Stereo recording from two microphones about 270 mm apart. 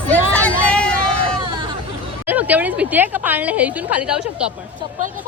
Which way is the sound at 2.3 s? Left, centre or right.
Centre.